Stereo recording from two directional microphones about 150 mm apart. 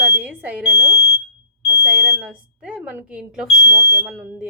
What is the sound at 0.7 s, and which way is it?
Speech, 25° right (ahead or behind).